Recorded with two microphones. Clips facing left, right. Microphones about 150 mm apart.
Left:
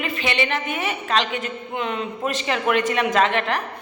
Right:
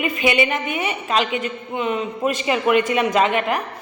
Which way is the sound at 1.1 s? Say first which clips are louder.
Right 2 dB; 5° right (ahead or behind).